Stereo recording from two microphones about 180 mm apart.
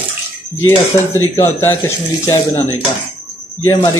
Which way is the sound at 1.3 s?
15° left (ahead or behind).